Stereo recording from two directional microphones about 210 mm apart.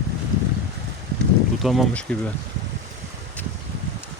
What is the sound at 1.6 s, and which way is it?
Speech, centre (ahead or behind).